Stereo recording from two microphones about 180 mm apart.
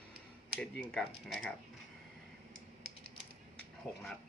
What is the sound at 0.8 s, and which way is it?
Speech, 5° left (ahead or behind).